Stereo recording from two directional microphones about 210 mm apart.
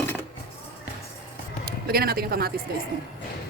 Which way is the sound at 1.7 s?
45° right (ahead or behind).